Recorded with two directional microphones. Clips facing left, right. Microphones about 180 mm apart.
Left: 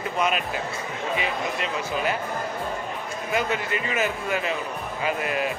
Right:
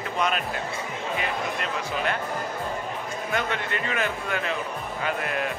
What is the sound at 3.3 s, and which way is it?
Speech, 5° left (ahead or behind).